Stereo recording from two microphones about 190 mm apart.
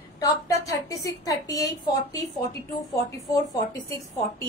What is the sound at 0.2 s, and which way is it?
A woman's voice, 20° left (ahead or behind).